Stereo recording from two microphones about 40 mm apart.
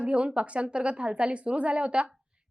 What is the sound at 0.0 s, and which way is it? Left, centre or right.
Speech, right.